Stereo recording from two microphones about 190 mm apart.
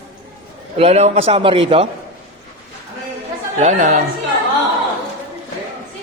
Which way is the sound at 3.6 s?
40° right (ahead or behind).